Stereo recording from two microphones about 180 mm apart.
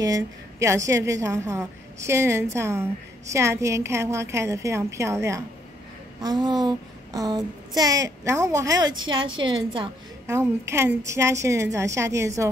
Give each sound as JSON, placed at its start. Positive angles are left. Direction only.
{"t": 0.0, "sound": "a woman's voice", "side_deg": -20}
{"t": 6.2, "sound": "a sound", "side_deg": -25}
{"t": 10.3, "sound": "a woman's voice", "side_deg": -15}